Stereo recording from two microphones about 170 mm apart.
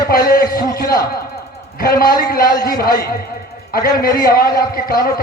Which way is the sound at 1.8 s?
60° left (ahead or behind).